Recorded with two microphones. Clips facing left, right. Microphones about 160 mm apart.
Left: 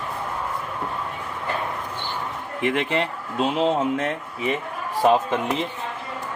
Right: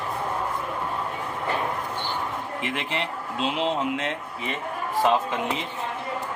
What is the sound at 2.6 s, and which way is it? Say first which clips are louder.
Speech: left 9 dB; 55° left (ahead or behind).